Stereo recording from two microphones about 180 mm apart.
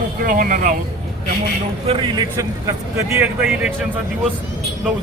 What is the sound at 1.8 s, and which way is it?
Speech, 30° right (ahead or behind).